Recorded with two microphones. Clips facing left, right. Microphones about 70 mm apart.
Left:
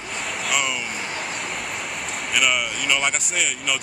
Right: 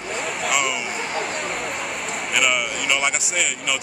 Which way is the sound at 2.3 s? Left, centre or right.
Centre.